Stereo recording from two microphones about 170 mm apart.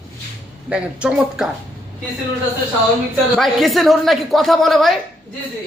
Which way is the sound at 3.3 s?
Centre (ahead or behind).